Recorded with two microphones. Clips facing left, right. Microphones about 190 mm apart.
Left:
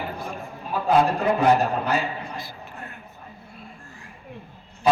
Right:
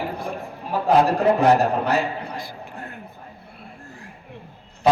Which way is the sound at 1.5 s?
75° right (ahead or behind).